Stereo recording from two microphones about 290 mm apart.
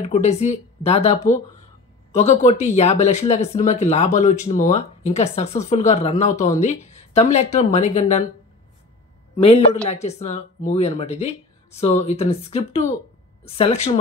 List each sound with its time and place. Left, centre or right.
0.0 s speech: left
9.3 s a man's voice: centre